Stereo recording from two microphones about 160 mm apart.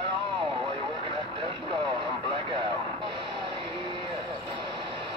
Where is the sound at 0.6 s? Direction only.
35° right (ahead or behind).